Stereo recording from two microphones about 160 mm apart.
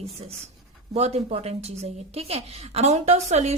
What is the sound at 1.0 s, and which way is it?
Speech, 40° right (ahead or behind).